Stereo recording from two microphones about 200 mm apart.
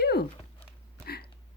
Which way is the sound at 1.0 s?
50° left (ahead or behind).